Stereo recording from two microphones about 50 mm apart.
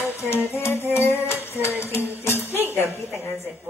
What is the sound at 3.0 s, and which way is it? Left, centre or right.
Music, left.